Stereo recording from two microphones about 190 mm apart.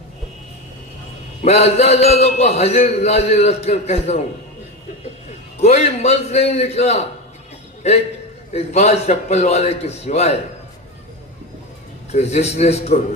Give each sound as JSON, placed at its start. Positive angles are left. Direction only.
{"t": 1.4, "sound": "a man's voice", "side_deg": 35}
{"t": 5.5, "sound": "a man's voice", "side_deg": 35}
{"t": 12.1, "sound": "a man's voice", "side_deg": 35}